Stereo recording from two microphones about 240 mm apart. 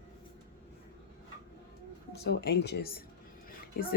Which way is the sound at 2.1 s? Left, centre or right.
Left.